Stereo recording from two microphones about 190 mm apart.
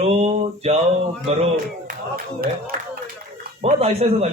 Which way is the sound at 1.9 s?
50° right (ahead or behind).